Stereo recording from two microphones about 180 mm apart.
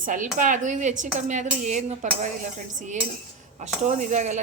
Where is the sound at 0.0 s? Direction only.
50° right (ahead or behind).